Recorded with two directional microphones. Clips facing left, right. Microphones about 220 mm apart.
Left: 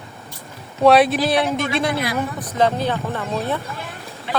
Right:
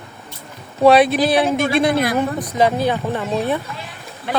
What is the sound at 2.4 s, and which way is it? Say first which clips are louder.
Speech: right 2 dB; 10° right (ahead or behind).